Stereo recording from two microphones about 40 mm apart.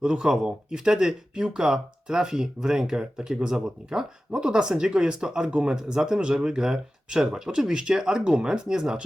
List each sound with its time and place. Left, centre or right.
0.0 s speech: centre